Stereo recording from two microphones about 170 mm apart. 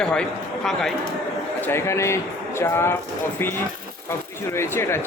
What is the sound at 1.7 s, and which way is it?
Speech, 15° left (ahead or behind).